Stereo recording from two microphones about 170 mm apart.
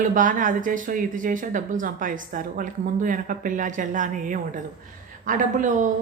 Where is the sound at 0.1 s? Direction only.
50° right (ahead or behind).